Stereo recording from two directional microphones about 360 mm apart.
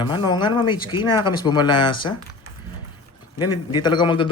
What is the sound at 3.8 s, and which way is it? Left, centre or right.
Speech, centre.